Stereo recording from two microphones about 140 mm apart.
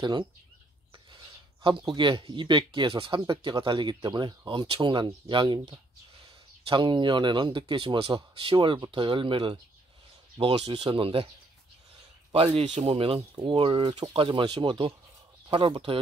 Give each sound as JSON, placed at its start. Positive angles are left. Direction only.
{"t": 1.6, "sound": "speech", "side_deg": -35}
{"t": 10.7, "sound": "speech", "side_deg": -35}
{"t": 12.5, "sound": "speech", "side_deg": -45}